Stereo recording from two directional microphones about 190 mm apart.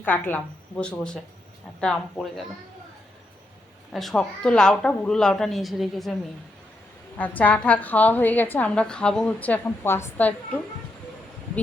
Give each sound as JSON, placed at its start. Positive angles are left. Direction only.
{"t": 0.0, "sound": "a woman's voice", "side_deg": 10}
{"t": 3.9, "sound": "a woman's voice", "side_deg": 0}
{"t": 7.2, "sound": "a woman's voice", "side_deg": 10}